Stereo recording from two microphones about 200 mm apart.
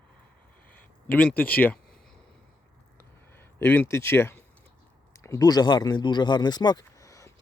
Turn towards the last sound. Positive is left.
turn(degrees=15)  # may be behind; listen again after turning